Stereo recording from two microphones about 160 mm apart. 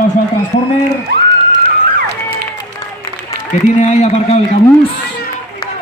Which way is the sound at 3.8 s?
45° left (ahead or behind).